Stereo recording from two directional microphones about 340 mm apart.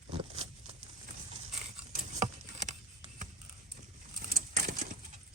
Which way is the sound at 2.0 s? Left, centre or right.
Right.